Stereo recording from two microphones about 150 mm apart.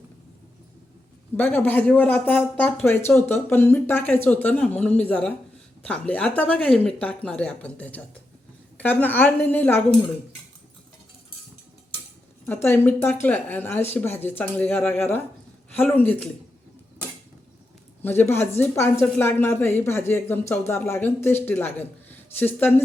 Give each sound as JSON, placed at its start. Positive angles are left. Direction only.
{"t": 1.4, "sound": "speech", "side_deg": 10}
{"t": 12.5, "sound": "speech", "side_deg": 15}
{"t": 18.0, "sound": "speech", "side_deg": 15}